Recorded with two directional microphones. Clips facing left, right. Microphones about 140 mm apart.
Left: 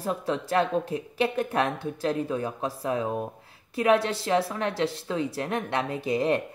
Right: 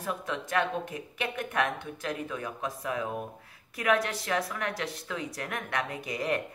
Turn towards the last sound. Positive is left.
turn(degrees=30)  # may be behind; listen again after turning